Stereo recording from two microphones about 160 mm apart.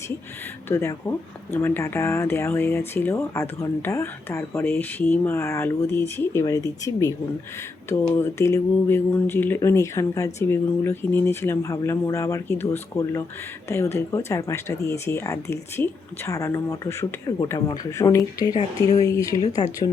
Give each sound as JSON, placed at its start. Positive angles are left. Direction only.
{"t": 0.7, "sound": "speech", "side_deg": 15}